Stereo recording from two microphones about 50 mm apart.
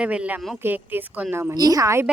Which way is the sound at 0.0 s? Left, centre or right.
Right.